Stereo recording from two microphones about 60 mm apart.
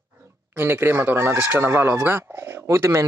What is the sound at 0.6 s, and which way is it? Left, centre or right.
Speech, right.